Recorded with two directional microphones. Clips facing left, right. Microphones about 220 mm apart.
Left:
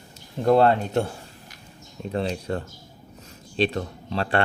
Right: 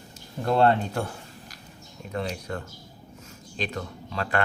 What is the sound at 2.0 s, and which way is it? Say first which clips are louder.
Speech: left 5 dB; 30° left (ahead or behind).